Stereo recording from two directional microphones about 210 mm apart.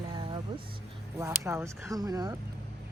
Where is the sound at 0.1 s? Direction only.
20° right (ahead or behind).